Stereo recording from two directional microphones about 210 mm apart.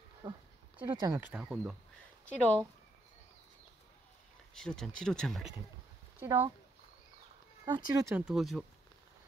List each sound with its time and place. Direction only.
0.2 s speech: 20° right (ahead or behind)
1.3 s speech: 5° right (ahead or behind)
2.2 s speech: 5° left (ahead or behind)
4.6 s speech: centre (ahead or behind)
6.1 s speech: 10° right (ahead or behind)
7.6 s speech: 20° right (ahead or behind)
8.3 s speech: centre (ahead or behind)